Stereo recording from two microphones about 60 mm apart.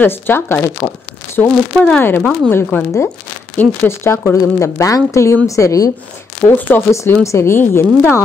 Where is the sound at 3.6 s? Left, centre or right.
Left.